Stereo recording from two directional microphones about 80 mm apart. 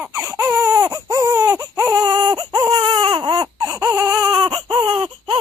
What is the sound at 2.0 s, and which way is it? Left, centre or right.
Baby cry, right.